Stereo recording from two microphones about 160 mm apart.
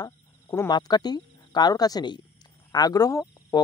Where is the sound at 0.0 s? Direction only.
25° left (ahead or behind).